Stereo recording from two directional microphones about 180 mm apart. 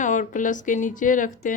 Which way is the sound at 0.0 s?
45° left (ahead or behind).